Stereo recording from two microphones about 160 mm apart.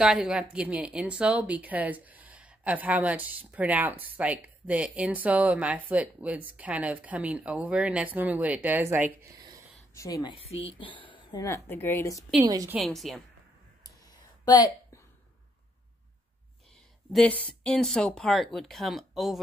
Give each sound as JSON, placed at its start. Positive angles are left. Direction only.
{"t": 0.0, "sound": "speech", "side_deg": -5}
{"t": 9.9, "sound": "speech", "side_deg": 20}
{"t": 11.4, "sound": "a woman's voice", "side_deg": 15}
{"t": 12.4, "sound": "a woman's voice", "side_deg": -25}
{"t": 12.8, "sound": "speech", "side_deg": 0}
{"t": 14.4, "sound": "a sound", "side_deg": 25}
{"t": 17.1, "sound": "speech", "side_deg": 5}